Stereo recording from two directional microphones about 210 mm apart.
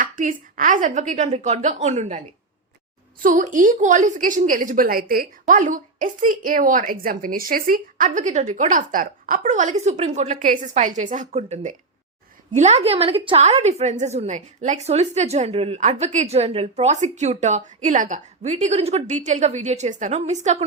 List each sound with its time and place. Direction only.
0.0 s a woman's voice: 40° right (ahead or behind)
3.2 s a woman's voice: 40° right (ahead or behind)